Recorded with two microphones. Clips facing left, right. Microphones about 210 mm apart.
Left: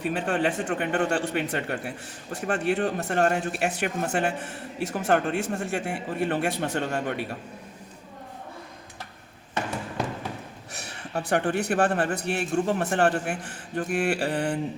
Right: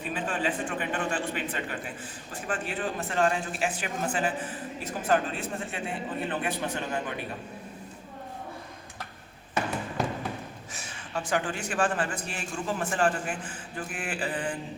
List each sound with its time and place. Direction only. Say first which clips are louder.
0.0 s speech: left 5 dB; 70° left (ahead or behind)
10.8 s a man's voice: left 4 dB; 65° left (ahead or behind)